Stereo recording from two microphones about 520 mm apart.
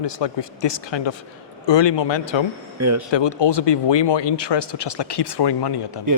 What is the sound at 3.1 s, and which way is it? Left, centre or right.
Speech, left.